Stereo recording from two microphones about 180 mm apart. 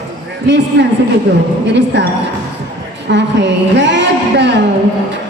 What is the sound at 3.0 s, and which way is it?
A woman's voice, 85° right.